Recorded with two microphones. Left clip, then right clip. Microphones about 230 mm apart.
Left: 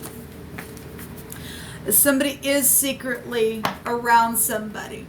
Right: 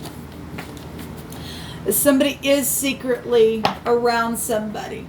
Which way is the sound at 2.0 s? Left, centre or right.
Left.